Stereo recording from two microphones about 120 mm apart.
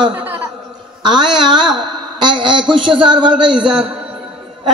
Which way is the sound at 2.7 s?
45° right (ahead or behind).